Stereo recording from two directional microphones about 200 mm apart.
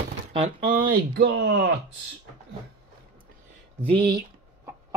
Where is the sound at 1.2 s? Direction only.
75° right (ahead or behind).